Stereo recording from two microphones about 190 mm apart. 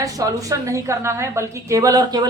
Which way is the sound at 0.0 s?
20° right (ahead or behind).